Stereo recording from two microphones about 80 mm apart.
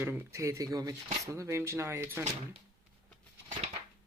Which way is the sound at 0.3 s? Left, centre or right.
Right.